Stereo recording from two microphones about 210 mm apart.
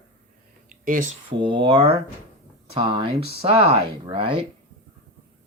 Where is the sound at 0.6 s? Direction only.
40° right (ahead or behind).